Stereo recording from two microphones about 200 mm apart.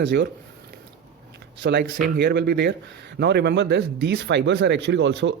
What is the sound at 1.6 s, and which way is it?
Speech, 60° right (ahead or behind).